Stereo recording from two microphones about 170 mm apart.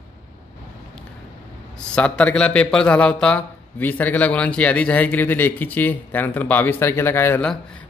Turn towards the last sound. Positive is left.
turn(degrees=15)  # may be behind; listen again after turning